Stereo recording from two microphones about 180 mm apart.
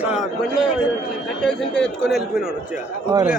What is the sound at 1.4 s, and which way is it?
Speech, 5° left (ahead or behind).